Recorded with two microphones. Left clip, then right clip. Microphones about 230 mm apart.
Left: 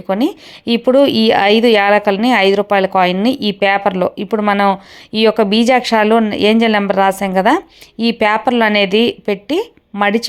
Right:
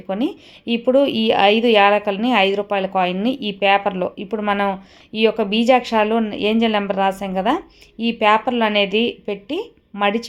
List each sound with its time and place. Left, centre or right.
0.1 s speech: centre